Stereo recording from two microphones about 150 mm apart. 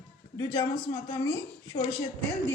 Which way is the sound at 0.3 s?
25° left (ahead or behind).